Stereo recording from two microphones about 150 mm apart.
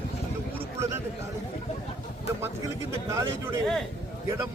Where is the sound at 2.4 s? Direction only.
20° right (ahead or behind).